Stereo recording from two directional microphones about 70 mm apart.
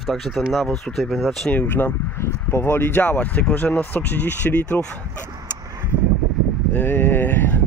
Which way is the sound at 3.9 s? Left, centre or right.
Left.